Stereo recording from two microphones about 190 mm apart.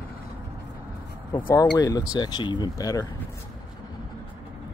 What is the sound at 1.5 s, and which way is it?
Speech, 20° left (ahead or behind).